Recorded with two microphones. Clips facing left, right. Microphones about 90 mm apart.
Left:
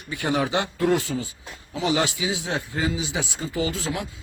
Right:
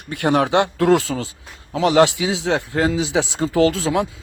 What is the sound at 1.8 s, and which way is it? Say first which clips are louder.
Speech: right 9 dB; 75° right (ahead or behind).